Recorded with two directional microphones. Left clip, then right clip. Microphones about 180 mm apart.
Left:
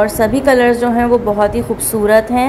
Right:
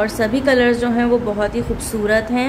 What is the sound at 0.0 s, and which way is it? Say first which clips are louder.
A woman's voice: left 5 dB; 10° left (ahead or behind).